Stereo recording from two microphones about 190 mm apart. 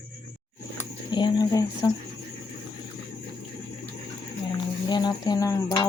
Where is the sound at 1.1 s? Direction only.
20° left (ahead or behind).